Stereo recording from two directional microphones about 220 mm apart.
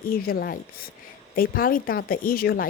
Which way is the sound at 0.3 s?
40° left (ahead or behind).